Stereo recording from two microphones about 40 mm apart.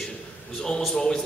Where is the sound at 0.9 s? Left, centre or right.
Centre.